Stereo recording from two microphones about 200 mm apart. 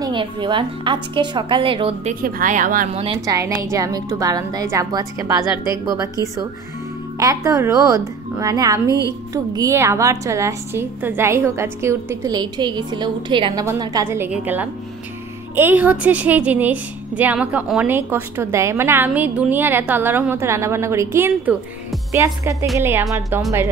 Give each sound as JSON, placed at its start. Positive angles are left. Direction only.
{"t": 0.0, "sound": "a woman's voice", "side_deg": -25}
{"t": 2.2, "sound": "speech", "side_deg": -45}
{"t": 3.3, "sound": "a woman's voice", "side_deg": -15}
{"t": 7.2, "sound": "a woman's voice", "side_deg": -15}
{"t": 8.8, "sound": "a woman's voice", "side_deg": 15}
{"t": 9.3, "sound": "a woman's voice", "side_deg": -20}
{"t": 23.0, "sound": "a woman's voice", "side_deg": 0}